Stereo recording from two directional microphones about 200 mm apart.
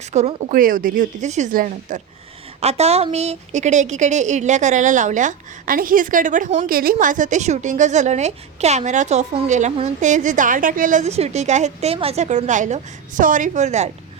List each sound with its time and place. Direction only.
0.1 s a woman's voice: 35° right (ahead or behind)